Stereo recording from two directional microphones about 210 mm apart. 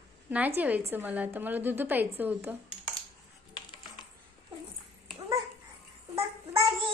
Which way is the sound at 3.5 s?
20° left (ahead or behind).